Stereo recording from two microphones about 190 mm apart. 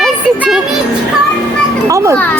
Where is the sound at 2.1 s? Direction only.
5° left (ahead or behind).